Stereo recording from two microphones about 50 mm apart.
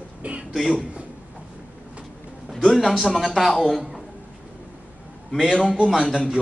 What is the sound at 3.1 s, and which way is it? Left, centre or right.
Speech, centre.